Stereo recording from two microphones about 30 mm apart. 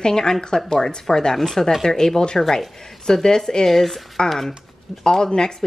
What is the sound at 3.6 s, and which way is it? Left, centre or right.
Speech, centre.